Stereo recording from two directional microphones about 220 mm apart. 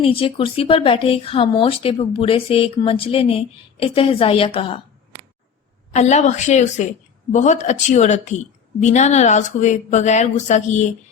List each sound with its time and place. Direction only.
0.0 s speech: 25° left (ahead or behind)
5.9 s speech: 30° left (ahead or behind)